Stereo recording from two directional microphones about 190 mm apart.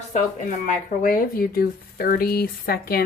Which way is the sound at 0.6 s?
45° left (ahead or behind).